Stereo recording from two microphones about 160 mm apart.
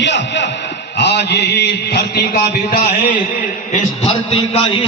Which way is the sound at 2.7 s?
55° left (ahead or behind).